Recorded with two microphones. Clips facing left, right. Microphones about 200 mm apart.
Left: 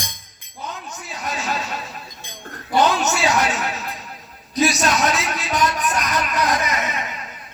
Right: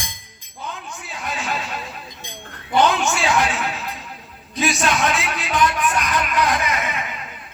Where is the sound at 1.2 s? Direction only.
40° left (ahead or behind).